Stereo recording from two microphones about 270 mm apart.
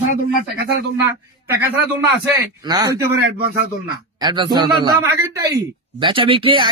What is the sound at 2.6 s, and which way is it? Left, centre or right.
Speech, centre.